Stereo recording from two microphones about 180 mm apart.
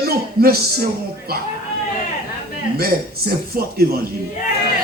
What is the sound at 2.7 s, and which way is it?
A man's voice, 55° right (ahead or behind).